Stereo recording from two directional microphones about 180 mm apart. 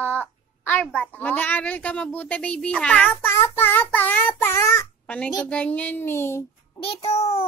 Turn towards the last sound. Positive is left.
turn(degrees=35)  # may be behind; listen again after turning